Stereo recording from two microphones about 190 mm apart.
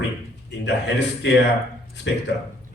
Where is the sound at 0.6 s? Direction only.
65° left (ahead or behind).